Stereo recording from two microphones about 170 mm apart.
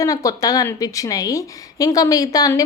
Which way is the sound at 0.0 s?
20° left (ahead or behind).